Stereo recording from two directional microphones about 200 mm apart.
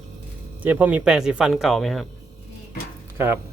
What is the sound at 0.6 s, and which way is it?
Speech, 10° right (ahead or behind).